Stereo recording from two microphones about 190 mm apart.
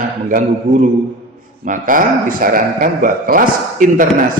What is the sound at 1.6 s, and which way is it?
A man's voice, 45° right (ahead or behind).